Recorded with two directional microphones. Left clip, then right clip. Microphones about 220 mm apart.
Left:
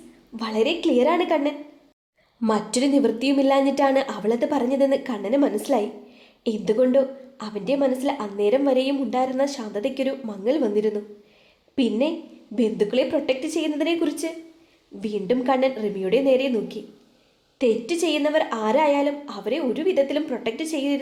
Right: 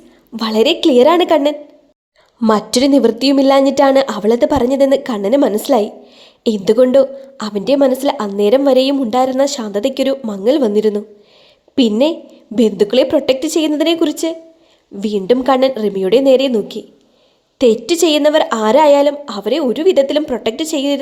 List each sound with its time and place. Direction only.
0.3 s a woman's voice: 45° right (ahead or behind)